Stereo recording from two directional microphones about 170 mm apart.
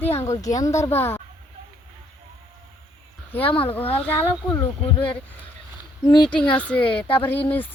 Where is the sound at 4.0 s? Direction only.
15° left (ahead or behind).